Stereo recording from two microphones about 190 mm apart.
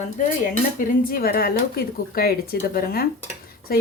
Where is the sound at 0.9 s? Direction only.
50° left (ahead or behind).